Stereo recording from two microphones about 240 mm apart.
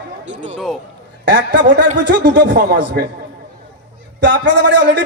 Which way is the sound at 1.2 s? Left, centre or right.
Right.